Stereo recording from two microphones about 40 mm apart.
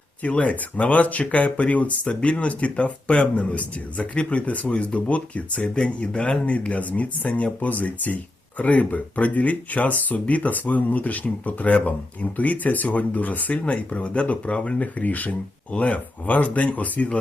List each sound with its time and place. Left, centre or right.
0.2 s speech: left